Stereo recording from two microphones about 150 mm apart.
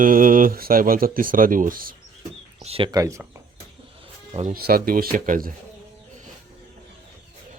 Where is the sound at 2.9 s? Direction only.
20° right (ahead or behind).